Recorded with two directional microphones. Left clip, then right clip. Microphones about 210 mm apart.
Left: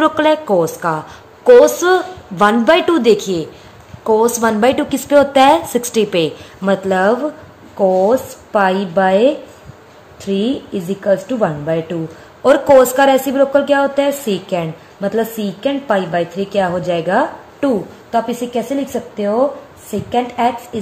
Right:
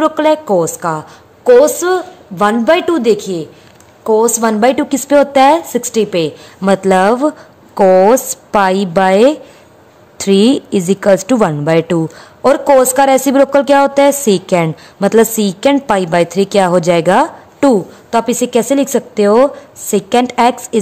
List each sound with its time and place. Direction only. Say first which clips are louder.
0.0 s a woman's voice: right 2 dB; 15° right (ahead or behind); by 20.8 s 50° right (ahead or behind)